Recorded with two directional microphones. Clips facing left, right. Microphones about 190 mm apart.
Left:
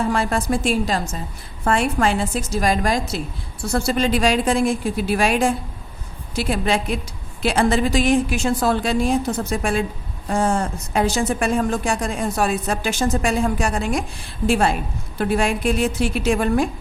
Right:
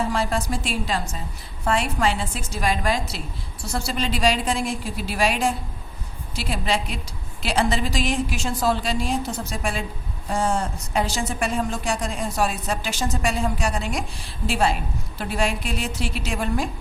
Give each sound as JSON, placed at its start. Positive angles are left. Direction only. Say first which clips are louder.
{"t": 0.1, "sound": "speech", "louder": "left 4 dB", "side_deg": 55}
{"t": 3.6, "sound": "speech", "louder": "left 7 dB", "side_deg": 55}